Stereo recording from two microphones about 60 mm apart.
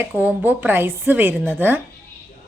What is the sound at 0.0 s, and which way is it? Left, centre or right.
Speech, right.